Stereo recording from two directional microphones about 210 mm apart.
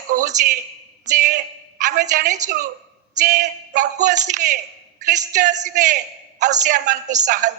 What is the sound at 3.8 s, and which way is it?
Speech, 35° right (ahead or behind).